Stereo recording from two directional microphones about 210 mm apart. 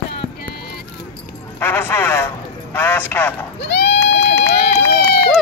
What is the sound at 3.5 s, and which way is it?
Run, 55° left (ahead or behind).